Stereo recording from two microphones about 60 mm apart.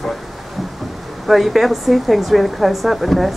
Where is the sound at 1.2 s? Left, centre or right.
Centre.